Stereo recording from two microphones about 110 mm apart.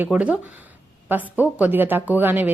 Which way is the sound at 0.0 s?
10° right (ahead or behind).